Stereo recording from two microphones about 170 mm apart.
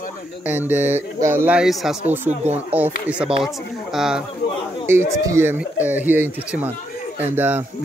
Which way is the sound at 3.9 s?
5° right (ahead or behind).